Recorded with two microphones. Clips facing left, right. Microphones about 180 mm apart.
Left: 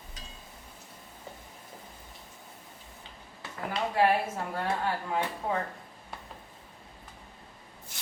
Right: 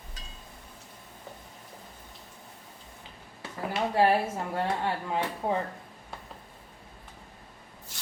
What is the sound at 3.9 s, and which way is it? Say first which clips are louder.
Speech: right 2 dB; 30° right (ahead or behind).